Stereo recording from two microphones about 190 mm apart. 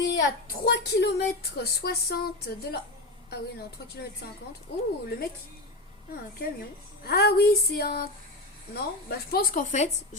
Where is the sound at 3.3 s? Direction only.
60° left (ahead or behind).